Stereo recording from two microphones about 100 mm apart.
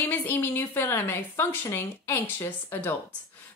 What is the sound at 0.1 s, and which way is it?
Speech, 20° left (ahead or behind).